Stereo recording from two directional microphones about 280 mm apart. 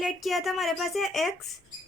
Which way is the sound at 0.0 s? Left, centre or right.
Centre.